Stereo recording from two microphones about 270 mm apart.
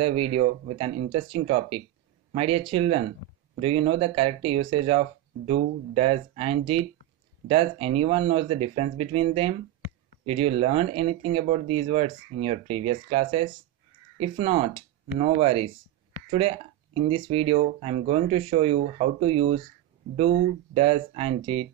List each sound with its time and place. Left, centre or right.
0.0 s speech: right